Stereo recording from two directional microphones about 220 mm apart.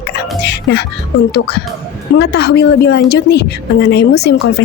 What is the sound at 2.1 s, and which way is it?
A woman's voice, 50° left (ahead or behind).